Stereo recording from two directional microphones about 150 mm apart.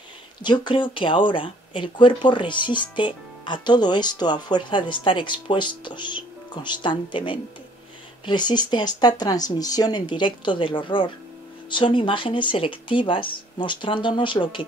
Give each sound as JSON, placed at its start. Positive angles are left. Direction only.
{"t": 0.4, "sound": "speech", "side_deg": 30}